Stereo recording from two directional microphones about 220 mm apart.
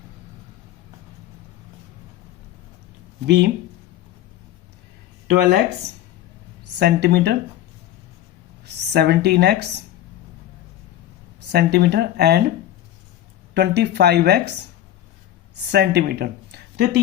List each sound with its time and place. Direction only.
3.2 s speech: 50° right (ahead or behind)
5.3 s speech: 50° right (ahead or behind)
6.7 s speech: 50° right (ahead or behind)
8.6 s speech: 50° right (ahead or behind)
11.5 s speech: 45° right (ahead or behind)
13.5 s speech: 50° right (ahead or behind)
15.7 s speech: 50° right (ahead or behind)